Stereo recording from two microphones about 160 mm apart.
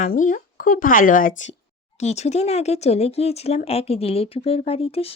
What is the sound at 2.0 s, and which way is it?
Speech, 45° left (ahead or behind).